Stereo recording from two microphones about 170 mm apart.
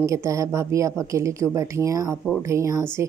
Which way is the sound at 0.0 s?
20° right (ahead or behind).